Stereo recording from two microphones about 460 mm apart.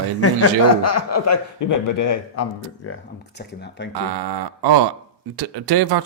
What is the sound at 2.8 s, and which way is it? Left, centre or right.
Speech, left.